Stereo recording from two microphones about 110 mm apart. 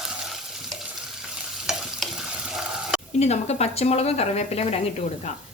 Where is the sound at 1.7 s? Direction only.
Centre (ahead or behind).